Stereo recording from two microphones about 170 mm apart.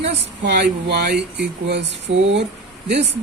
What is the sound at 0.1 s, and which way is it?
Speech, 80° right.